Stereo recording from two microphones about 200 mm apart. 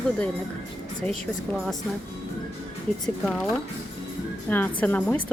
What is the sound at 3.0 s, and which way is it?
Speech, centre (ahead or behind).